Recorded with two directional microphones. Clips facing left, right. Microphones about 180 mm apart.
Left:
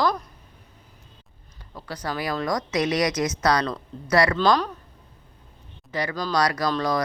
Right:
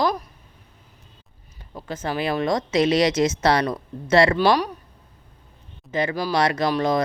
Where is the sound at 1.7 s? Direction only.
25° right (ahead or behind).